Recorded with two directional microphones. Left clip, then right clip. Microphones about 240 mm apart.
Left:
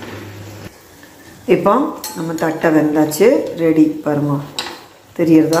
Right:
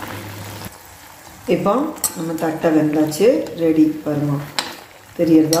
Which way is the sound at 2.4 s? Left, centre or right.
Centre.